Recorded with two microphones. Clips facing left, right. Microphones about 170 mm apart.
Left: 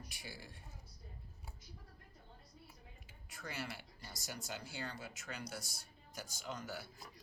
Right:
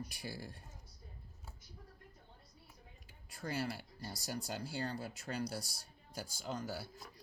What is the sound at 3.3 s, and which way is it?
Speech, 35° right (ahead or behind).